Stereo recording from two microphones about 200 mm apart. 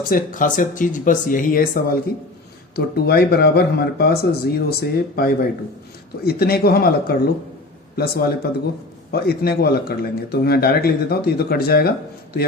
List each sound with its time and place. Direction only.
0.1 s speech: 40° left (ahead or behind)